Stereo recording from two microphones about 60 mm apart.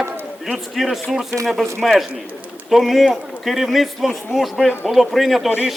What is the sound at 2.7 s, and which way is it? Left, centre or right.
A man's voice, centre.